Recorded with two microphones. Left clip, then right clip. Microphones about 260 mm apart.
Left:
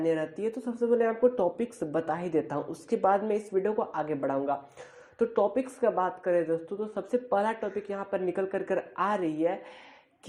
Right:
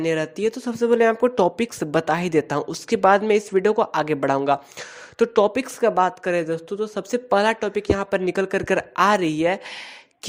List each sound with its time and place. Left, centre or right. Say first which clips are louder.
0.0 s speech: right 7 dB; right